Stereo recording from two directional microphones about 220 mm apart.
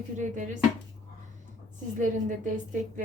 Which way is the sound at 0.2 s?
35° right (ahead or behind).